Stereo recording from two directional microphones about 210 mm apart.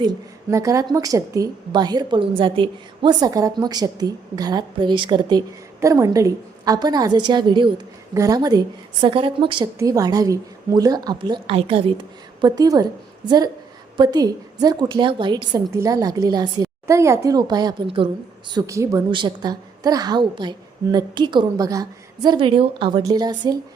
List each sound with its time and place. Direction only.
0.5 s a woman's voice: 15° right (ahead or behind)